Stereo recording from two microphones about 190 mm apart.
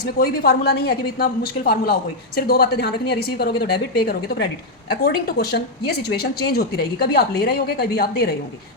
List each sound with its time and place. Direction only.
0.2 s a woman's voice: 55° left (ahead or behind)